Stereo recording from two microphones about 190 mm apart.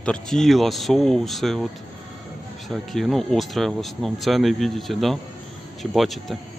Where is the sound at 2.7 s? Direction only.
Centre (ahead or behind).